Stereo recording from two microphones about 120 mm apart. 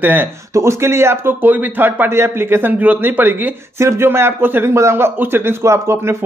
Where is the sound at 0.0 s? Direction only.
15° right (ahead or behind).